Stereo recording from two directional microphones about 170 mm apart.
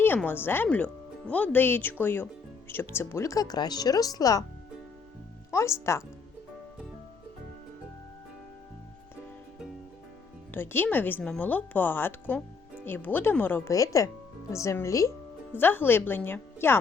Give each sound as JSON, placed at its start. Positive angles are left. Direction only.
{"t": 0.0, "sound": "a woman's voice", "side_deg": 10}
{"t": 5.5, "sound": "a woman's voice", "side_deg": 15}
{"t": 10.5, "sound": "a woman's voice", "side_deg": 10}